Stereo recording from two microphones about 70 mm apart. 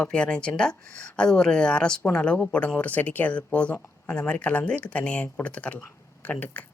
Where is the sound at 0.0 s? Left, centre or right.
Centre.